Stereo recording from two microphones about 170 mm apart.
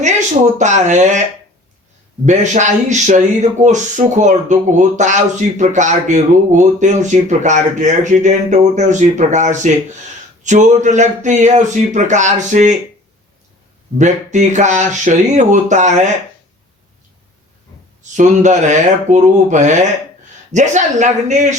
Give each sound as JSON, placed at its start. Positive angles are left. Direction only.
{"t": 0.6, "sound": "speech", "side_deg": -45}
{"t": 2.2, "sound": "speech", "side_deg": -45}
{"t": 14.0, "sound": "speech", "side_deg": -45}
{"t": 18.0, "sound": "speech", "side_deg": -45}